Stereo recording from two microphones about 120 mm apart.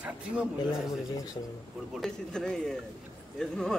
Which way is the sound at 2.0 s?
5° left (ahead or behind).